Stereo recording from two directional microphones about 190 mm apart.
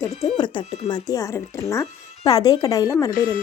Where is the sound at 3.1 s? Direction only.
50° left (ahead or behind).